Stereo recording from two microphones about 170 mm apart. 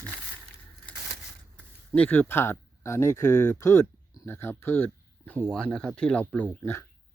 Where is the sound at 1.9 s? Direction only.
10° left (ahead or behind).